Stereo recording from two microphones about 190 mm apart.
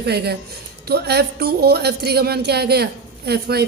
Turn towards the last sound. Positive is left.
turn(degrees=-55)  # may be behind; listen again after turning